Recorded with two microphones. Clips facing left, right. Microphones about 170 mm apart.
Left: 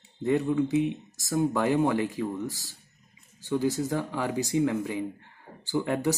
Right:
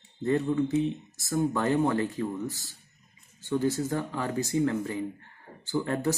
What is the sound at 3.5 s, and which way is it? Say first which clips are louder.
Speech: even; 10° left (ahead or behind).